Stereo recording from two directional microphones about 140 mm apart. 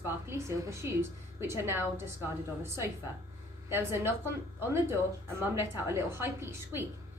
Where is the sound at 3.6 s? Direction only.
15° right (ahead or behind).